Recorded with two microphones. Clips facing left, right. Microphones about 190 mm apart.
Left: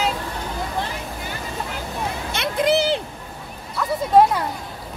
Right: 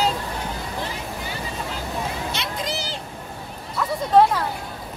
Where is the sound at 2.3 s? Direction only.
55° left (ahead or behind).